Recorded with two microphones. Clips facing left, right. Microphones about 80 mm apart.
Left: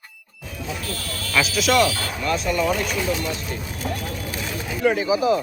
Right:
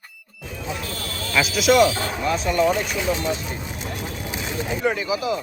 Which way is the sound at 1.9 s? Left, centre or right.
Right.